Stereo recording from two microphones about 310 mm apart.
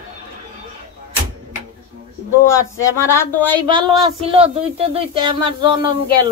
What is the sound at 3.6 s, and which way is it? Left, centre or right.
Speech, centre.